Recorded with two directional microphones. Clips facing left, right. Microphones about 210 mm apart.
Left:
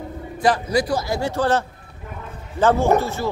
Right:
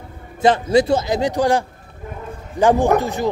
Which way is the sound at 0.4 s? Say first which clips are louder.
Right 5 dB; 25° right (ahead or behind).